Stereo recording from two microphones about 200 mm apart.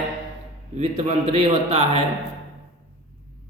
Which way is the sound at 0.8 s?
30° right (ahead or behind).